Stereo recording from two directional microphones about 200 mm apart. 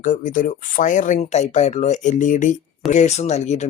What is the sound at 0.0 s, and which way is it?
Speech, 40° left (ahead or behind).